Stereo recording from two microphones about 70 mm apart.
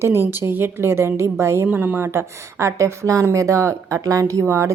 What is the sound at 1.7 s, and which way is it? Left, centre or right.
A woman's voice, right.